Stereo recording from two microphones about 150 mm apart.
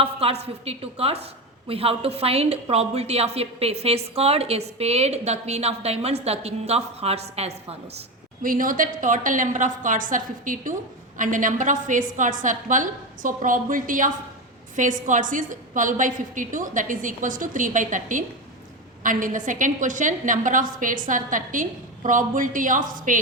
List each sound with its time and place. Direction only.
0.0 s a sound: 40° right (ahead or behind)
0.4 s a woman's voice: 40° right (ahead or behind)
8.4 s a woman's voice: 65° right (ahead or behind)